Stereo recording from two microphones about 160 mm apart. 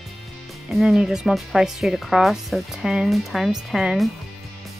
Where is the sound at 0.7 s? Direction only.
5° right (ahead or behind).